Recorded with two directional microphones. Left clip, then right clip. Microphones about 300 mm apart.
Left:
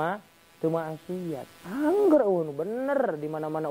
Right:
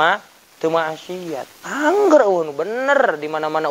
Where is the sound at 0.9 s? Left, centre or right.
Right.